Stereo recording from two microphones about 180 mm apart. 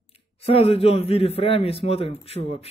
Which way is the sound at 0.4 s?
35° left (ahead or behind).